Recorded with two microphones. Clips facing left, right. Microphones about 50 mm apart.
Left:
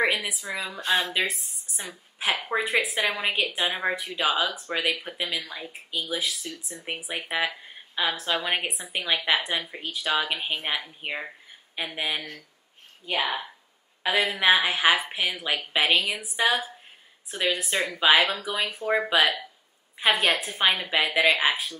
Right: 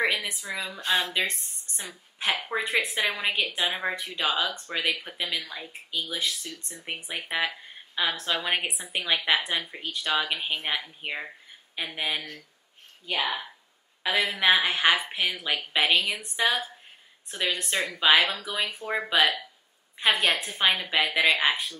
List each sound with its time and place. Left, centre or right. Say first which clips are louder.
0.0 s speech: left 2 dB; centre
0.8 s speech: left 1 dB; left
1.1 s a woman's voice: left 1 dB; centre
13.0 s speech: left 1 dB; centre
14.0 s a woman's voice: left 1 dB; centre
18.2 s a woman's voice: left 2 dB; centre